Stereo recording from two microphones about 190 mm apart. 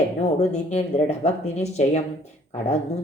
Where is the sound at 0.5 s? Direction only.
35° left (ahead or behind).